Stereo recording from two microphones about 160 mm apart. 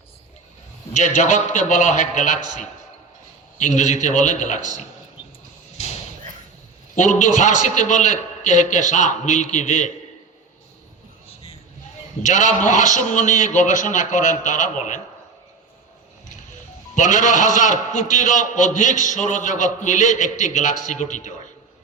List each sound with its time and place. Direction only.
0.9 s a man's voice: 50° left (ahead or behind)
3.6 s a man's voice: 50° left (ahead or behind)
5.7 s a sound: 45° left (ahead or behind)
6.9 s a man's voice: 50° left (ahead or behind)
12.2 s a man's voice: 50° left (ahead or behind)
16.9 s a man's voice: 50° left (ahead or behind)